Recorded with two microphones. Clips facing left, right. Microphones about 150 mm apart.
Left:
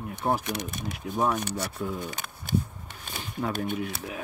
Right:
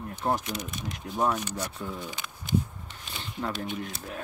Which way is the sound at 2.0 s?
50° left (ahead or behind).